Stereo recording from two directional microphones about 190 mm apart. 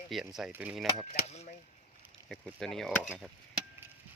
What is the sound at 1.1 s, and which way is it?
Speech, 35° left (ahead or behind).